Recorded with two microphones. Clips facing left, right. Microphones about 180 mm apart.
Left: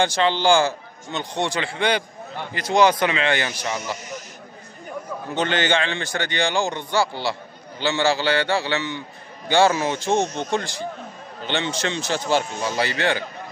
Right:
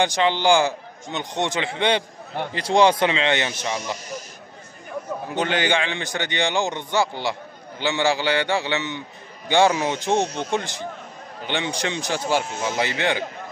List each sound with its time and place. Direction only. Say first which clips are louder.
0.0 s speech: even; 15° right (ahead or behind)
5.3 s speech: left 1 dB; 10° right (ahead or behind)